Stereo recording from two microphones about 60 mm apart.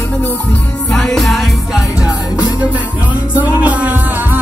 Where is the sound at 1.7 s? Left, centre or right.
Centre.